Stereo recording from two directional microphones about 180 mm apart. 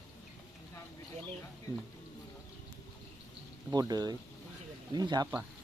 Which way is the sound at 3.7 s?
20° right (ahead or behind).